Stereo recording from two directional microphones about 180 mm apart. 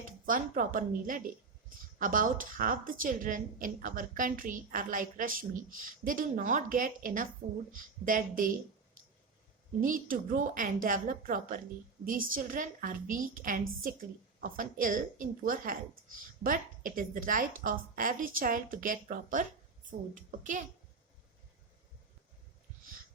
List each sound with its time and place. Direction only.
0.0 s a woman's voice: 50° right (ahead or behind)
9.8 s a woman's voice: 50° right (ahead or behind)